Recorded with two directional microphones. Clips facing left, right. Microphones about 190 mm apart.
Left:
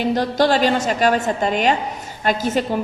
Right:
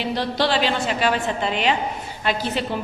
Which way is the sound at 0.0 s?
45° left (ahead or behind).